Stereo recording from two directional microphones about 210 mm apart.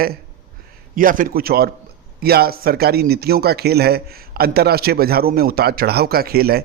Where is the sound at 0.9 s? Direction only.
40° right (ahead or behind).